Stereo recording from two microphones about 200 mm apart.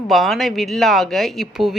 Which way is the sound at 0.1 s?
Centre (ahead or behind).